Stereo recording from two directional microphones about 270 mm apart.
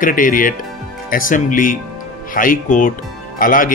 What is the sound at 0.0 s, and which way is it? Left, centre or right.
Speech, left.